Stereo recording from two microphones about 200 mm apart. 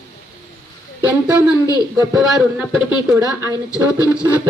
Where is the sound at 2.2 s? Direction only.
Centre (ahead or behind).